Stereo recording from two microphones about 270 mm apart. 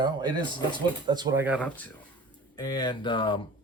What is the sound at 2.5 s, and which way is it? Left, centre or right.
Speech, centre.